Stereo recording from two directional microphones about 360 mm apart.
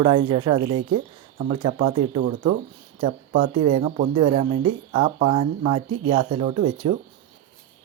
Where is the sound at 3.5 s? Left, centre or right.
Centre.